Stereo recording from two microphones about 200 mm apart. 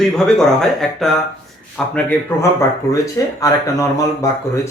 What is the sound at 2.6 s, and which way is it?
Speech, 15° left (ahead or behind).